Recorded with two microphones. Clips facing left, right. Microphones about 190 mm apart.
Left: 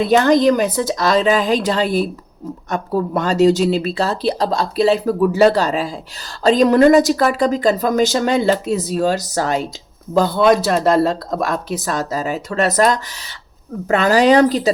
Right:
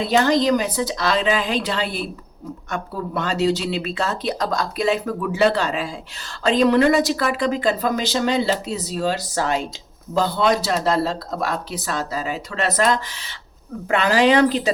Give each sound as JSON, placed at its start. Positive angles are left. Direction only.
{"t": 0.1, "sound": "speech", "side_deg": 50}
{"t": 10.2, "sound": "speech", "side_deg": 50}